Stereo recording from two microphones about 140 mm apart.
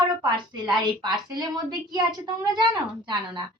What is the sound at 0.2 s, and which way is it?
A woman's voice, 30° right (ahead or behind).